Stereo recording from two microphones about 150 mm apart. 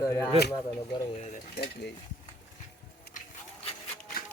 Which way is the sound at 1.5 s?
90° left.